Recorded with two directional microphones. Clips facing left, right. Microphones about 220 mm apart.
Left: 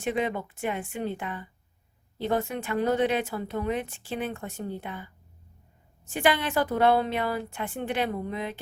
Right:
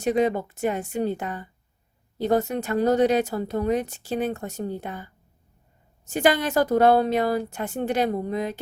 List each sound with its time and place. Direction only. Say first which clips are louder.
0.0 s speech: right 6 dB; 40° right (ahead or behind)